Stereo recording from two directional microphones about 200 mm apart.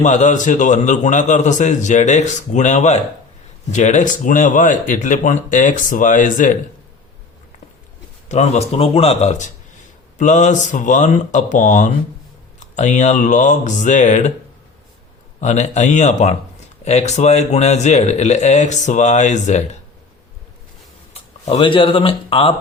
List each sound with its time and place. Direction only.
0.0 s a man's voice: 35° left (ahead or behind)
8.3 s a man's voice: 35° left (ahead or behind)
15.4 s a man's voice: 35° left (ahead or behind)
21.1 s speech: 30° left (ahead or behind)